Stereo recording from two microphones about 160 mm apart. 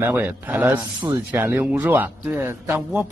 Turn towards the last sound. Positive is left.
turn(degrees=-15)  # may be behind; listen again after turning